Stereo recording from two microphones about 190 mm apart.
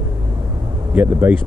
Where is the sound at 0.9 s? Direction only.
5° right (ahead or behind).